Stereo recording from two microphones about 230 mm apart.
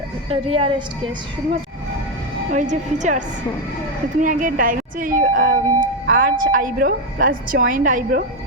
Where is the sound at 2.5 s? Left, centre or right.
Right.